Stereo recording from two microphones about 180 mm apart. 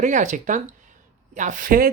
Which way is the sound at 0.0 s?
40° right (ahead or behind).